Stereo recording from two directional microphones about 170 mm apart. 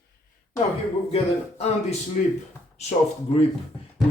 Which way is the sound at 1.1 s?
40° left (ahead or behind).